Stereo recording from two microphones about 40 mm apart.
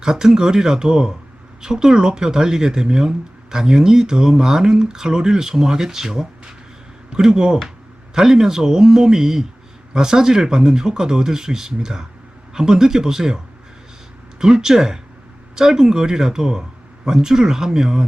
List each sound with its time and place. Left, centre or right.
0.0 s speech: centre